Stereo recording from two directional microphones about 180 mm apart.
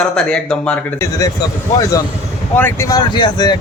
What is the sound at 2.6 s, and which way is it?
Speech, 15° left (ahead or behind).